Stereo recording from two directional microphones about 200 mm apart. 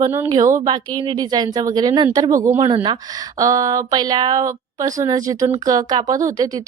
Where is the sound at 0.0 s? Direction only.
15° right (ahead or behind).